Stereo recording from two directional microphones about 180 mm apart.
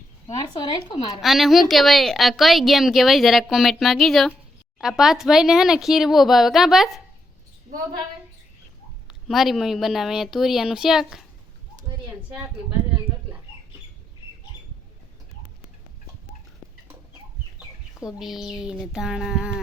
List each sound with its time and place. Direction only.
0.3 s speech: 25° left (ahead or behind)
1.2 s a woman's voice: centre (ahead or behind)
9.0 s a woman's voice: centre (ahead or behind)
18.0 s a woman's voice: centre (ahead or behind)